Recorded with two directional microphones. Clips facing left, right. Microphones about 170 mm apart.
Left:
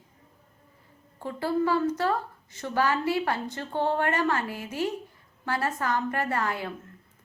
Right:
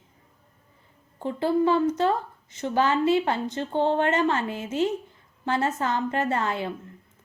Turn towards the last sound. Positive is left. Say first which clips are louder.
# right 3 dB
turn(degrees=-25)  # may be behind; listen again after turning